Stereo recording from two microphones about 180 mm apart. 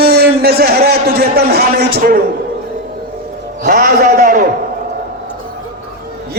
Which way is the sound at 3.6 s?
55° right (ahead or behind).